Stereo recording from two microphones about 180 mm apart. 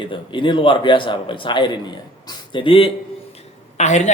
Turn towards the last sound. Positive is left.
turn(degrees=40)  # may be behind; listen again after turning